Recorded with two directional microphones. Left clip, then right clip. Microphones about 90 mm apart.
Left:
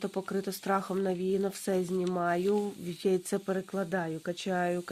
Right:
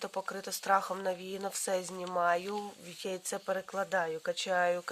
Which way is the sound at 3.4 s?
25° right (ahead or behind).